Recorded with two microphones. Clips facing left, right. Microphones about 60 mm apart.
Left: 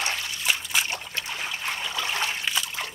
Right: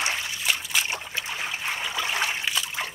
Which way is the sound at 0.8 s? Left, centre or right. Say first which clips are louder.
Right 1 dB; centre.